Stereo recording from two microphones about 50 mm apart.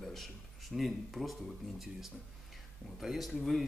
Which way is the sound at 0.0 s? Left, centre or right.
Centre.